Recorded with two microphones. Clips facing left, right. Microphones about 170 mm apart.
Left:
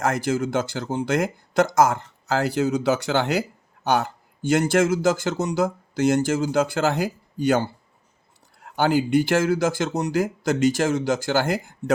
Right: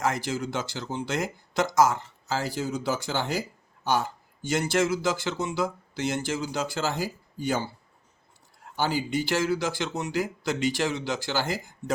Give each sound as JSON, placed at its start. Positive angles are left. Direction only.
{"t": 0.0, "sound": "speech", "side_deg": 50}
{"t": 8.7, "sound": "speech", "side_deg": 60}